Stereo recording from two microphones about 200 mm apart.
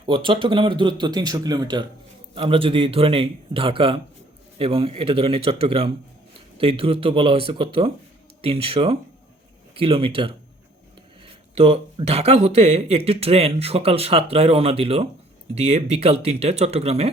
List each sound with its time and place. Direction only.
0.0 s speech: 25° right (ahead or behind)